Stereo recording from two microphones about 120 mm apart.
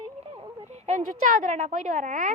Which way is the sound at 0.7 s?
90° right.